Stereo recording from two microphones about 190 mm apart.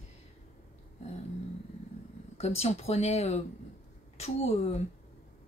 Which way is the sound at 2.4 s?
35° left (ahead or behind).